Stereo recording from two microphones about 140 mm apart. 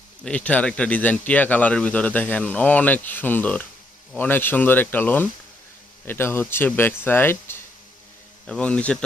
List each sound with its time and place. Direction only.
0.3 s speech: 10° left (ahead or behind)